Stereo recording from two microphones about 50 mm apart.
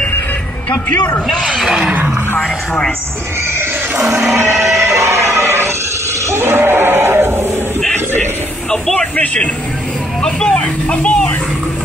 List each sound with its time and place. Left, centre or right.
0.9 s a man's voice: left
1.7 s roar: right
2.3 s speech: centre
4.5 s music: centre
4.7 s music: right
6.3 s a sound: right
8.9 s speech: left